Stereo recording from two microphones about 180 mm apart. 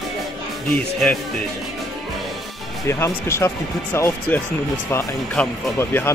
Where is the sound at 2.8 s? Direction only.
15° left (ahead or behind).